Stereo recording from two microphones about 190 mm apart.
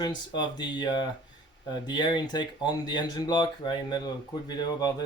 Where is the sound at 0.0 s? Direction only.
20° left (ahead or behind).